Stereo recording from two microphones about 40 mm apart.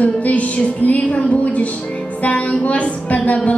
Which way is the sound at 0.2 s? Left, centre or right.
Left.